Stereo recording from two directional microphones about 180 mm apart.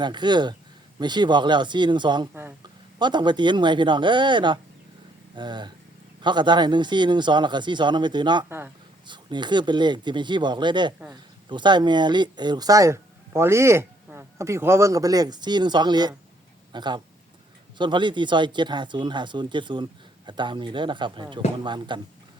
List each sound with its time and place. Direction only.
0.0 s speech: 25° right (ahead or behind)
2.3 s a sound: 10° right (ahead or behind)
3.0 s speech: 25° right (ahead or behind)
8.4 s speech: 15° right (ahead or behind)
9.0 s speech: 25° right (ahead or behind)